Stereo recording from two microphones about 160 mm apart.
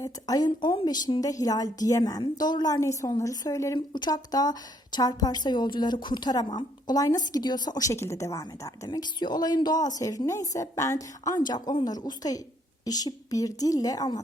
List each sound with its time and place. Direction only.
0.0 s a woman's voice: 25° left (ahead or behind)